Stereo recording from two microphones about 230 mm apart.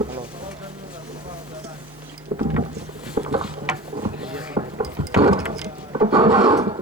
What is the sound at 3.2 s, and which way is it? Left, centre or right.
Mechanisms, right.